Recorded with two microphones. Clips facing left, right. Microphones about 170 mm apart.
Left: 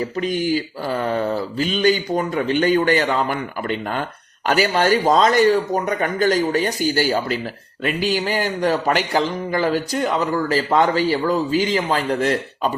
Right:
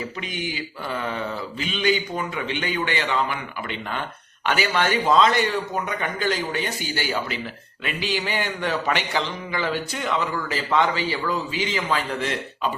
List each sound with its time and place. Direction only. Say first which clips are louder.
0.0 s a man's voice: left 9 dB; 40° left (ahead or behind)